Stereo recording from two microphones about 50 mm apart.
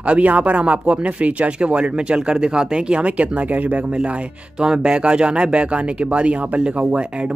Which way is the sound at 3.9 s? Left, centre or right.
Right.